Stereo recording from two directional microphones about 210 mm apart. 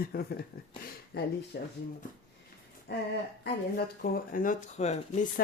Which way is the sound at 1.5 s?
55° left (ahead or behind).